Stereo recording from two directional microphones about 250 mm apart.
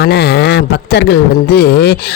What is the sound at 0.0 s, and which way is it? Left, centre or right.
Speech, left.